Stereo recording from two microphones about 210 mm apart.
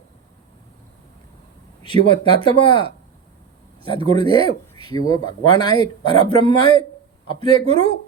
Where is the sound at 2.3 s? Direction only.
25° left (ahead or behind).